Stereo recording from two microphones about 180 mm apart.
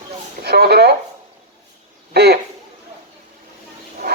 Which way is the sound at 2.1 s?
65° right (ahead or behind).